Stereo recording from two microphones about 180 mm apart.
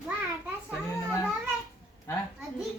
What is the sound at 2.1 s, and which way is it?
Speech, 15° left (ahead or behind).